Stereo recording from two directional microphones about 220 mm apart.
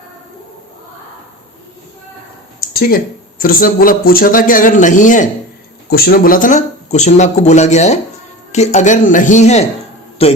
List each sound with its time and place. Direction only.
2.7 s a man's voice: 40° left (ahead or behind); by 10.3 s 25° left (ahead or behind)